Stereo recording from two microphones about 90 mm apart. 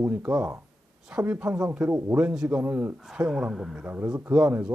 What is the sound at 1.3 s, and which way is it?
Speech, 15° right (ahead or behind).